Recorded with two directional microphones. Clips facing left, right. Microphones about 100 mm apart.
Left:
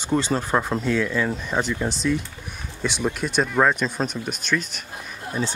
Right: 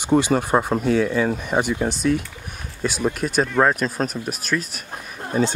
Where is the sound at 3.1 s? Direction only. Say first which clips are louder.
Right 2 dB; 45° right (ahead or behind).